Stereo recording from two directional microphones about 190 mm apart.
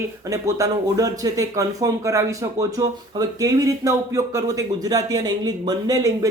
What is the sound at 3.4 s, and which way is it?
Speech, 20° right (ahead or behind).